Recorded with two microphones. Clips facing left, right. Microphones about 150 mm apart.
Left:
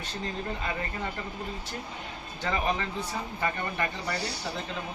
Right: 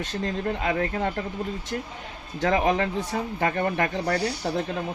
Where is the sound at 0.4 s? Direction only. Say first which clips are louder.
Right 8 dB; 65° right (ahead or behind).